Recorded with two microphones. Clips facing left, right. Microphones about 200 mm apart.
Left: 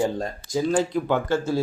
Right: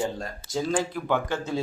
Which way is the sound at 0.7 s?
15° left (ahead or behind).